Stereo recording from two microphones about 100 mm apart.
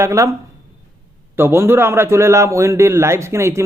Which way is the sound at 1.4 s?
25° right (ahead or behind).